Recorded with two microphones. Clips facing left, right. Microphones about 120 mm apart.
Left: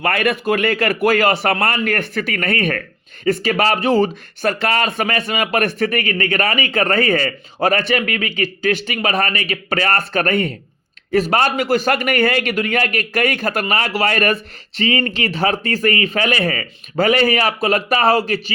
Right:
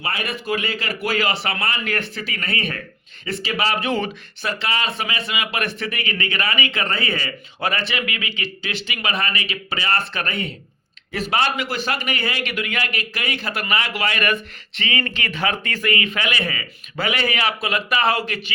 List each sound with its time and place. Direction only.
0.0 s a man's voice: 55° left (ahead or behind); by 4.5 s 35° left (ahead or behind)
4.6 s a man's voice: 50° left (ahead or behind)